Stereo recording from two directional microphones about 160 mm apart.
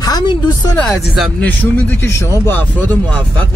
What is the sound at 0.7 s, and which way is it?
Speech, 5° left (ahead or behind).